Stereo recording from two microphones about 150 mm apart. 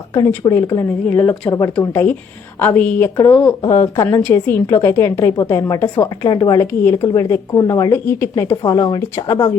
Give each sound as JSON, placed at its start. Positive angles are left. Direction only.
{"t": 0.1, "sound": "a woman's voice", "side_deg": 20}
{"t": 1.0, "sound": "a woman's voice", "side_deg": 10}